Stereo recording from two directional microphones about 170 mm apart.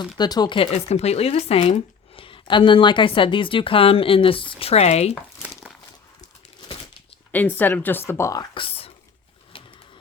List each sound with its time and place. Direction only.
0.2 s speech: 25° left (ahead or behind); by 5.1 s 40° left (ahead or behind)
7.3 s speech: 10° left (ahead or behind); by 8.9 s 35° left (ahead or behind)